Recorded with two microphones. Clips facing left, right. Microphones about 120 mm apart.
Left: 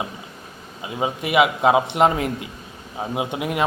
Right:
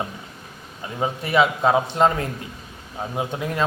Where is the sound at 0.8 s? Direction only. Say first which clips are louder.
Left 1 dB; 10° left (ahead or behind).